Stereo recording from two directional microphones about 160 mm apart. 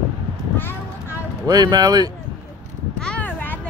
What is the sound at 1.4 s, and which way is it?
Speech, 25° right (ahead or behind).